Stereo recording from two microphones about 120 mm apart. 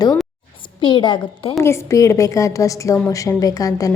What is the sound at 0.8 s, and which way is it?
Speech, 40° left (ahead or behind).